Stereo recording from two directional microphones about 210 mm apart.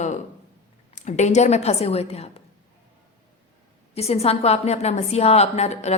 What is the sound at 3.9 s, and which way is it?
A woman's voice, 30° left (ahead or behind).